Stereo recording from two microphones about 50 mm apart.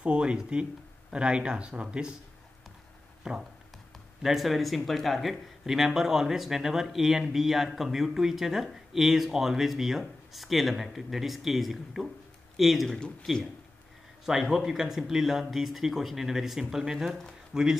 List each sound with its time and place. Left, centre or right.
0.0 s speech: right
3.3 s speech: centre
13.0 s speech: centre
14.2 s speech: centre